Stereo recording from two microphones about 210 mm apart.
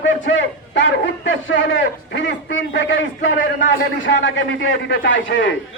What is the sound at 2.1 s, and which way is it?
A man's voice, 55° left (ahead or behind).